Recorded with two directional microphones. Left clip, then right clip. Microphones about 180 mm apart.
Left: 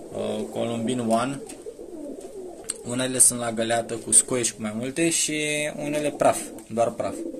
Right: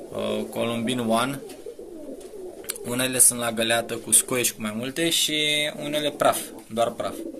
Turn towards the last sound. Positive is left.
turn(degrees=25)  # may be behind; listen again after turning